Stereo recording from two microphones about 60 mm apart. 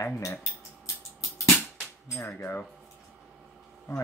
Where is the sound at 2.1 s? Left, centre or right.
Left.